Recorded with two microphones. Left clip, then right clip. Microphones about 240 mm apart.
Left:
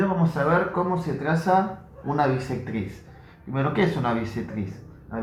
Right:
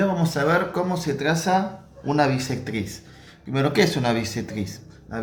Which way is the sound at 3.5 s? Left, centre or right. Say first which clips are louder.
Right 4 dB; right.